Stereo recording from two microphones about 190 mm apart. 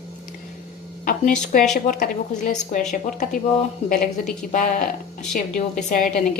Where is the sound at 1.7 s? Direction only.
45° left (ahead or behind).